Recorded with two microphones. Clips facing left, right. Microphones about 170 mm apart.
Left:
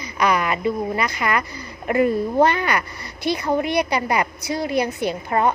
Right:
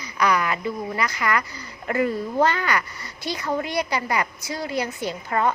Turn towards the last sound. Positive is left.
turn(degrees=20)  # may be behind; listen again after turning